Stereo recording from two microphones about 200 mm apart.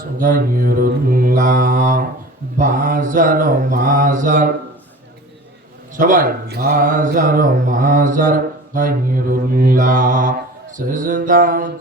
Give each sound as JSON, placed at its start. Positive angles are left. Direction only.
{"t": 0.2, "sound": "speech", "side_deg": -45}
{"t": 6.0, "sound": "speech", "side_deg": -45}